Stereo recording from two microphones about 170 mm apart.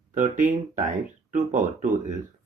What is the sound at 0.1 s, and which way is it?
Speech, 50° right (ahead or behind).